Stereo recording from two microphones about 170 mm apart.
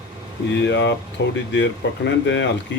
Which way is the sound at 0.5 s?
90° left.